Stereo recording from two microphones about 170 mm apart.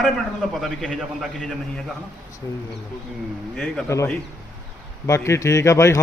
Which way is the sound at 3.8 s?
15° left (ahead or behind).